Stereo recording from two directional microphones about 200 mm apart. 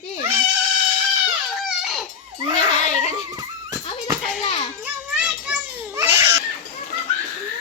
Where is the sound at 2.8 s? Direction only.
35° left (ahead or behind).